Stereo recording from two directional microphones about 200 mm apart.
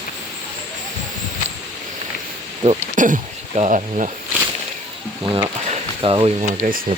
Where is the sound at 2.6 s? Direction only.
40° right (ahead or behind).